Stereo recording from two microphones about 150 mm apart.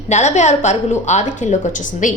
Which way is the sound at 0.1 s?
50° left (ahead or behind).